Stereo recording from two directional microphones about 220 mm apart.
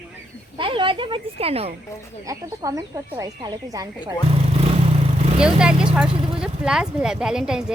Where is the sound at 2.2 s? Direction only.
15° right (ahead or behind).